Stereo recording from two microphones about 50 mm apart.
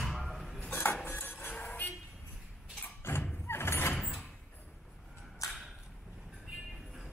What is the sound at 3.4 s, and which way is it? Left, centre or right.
Vehicle, left.